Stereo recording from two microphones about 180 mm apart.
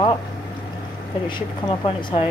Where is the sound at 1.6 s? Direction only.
30° left (ahead or behind).